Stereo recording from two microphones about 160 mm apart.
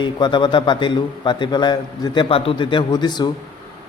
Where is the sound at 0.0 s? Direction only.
30° left (ahead or behind).